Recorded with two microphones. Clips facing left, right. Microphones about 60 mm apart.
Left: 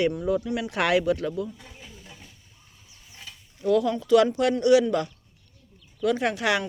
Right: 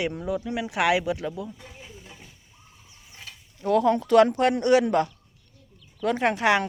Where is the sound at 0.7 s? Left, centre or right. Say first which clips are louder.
Left 1 dB; centre.